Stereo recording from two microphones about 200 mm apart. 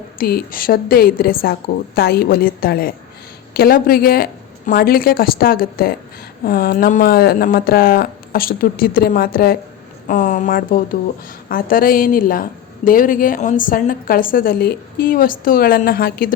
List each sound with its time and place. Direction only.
0.2 s a woman's voice: 50° left (ahead or behind)